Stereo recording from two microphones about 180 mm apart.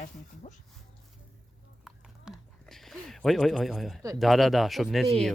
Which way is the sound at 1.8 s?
Centre (ahead or behind).